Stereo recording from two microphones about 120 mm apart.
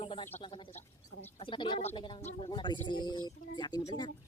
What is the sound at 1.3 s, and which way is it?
Speech, 45° left (ahead or behind).